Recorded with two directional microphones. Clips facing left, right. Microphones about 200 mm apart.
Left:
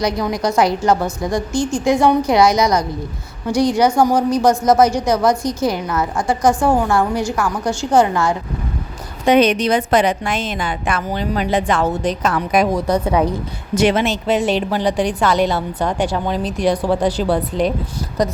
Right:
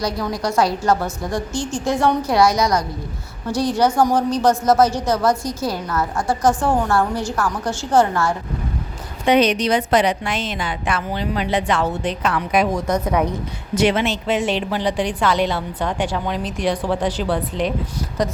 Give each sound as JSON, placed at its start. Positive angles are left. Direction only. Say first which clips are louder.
{"t": 0.0, "sound": "a woman's voice", "louder": "left 4 dB", "side_deg": 20}
{"t": 9.2, "sound": "a woman's voice", "louder": "left 3 dB", "side_deg": 50}
{"t": 13.7, "sound": "a woman's voice", "louder": "left 2 dB", "side_deg": 45}